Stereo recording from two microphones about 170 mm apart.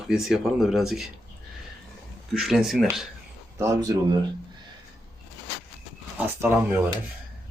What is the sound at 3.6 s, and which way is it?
Speech, 20° right (ahead or behind).